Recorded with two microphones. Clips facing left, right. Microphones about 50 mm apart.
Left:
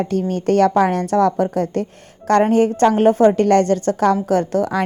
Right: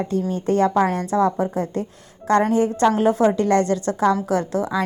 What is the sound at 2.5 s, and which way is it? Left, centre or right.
A woman's voice, left.